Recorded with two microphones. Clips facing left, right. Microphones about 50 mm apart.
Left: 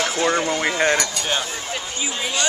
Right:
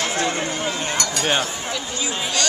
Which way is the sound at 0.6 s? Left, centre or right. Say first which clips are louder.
Left 5 dB; left.